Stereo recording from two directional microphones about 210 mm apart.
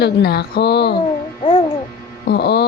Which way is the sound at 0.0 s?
50° left (ahead or behind).